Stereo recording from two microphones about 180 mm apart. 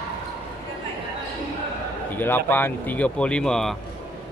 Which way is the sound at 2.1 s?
10° left (ahead or behind).